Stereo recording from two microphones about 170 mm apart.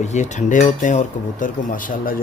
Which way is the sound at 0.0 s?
45° left (ahead or behind).